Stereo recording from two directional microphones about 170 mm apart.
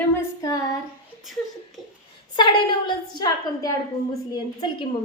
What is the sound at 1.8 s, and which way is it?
Speech, centre (ahead or behind).